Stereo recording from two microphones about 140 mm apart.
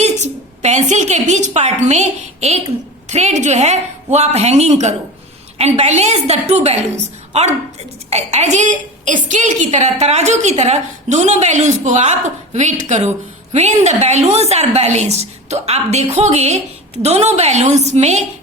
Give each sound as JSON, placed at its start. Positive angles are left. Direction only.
{"t": 0.0, "sound": "a woman's voice", "side_deg": -55}